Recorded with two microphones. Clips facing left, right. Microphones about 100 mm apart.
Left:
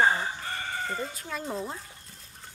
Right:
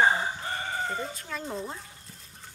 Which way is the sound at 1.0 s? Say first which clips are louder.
Left 1 dB; 5° left (ahead or behind).